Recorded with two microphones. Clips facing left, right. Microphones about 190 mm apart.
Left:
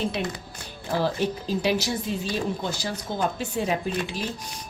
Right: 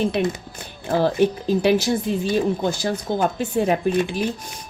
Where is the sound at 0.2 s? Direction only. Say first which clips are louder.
Right 8 dB; 55° right (ahead or behind).